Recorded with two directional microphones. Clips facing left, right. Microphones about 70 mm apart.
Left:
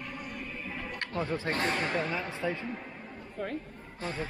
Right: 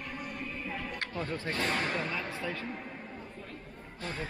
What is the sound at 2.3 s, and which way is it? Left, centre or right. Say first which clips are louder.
Speech: left 3 dB; left.